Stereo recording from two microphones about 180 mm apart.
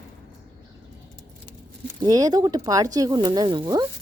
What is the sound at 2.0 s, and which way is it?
Speech, 20° right (ahead or behind).